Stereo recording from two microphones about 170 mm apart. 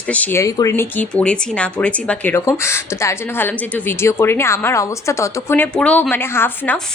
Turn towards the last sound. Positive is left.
turn(degrees=10)  # may be behind; listen again after turning